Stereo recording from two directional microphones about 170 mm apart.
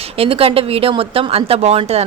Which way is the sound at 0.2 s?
35° right (ahead or behind).